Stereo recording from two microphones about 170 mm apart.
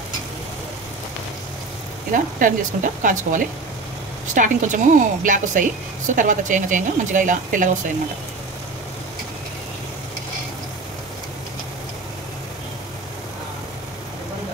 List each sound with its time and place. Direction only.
2.3 s a woman's voice: 50° right (ahead or behind)